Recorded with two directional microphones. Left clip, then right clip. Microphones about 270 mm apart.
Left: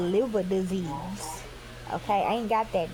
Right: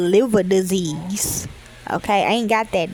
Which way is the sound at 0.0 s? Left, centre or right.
Right.